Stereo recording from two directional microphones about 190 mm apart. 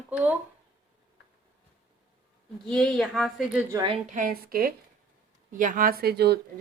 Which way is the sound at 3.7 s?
25° right (ahead or behind).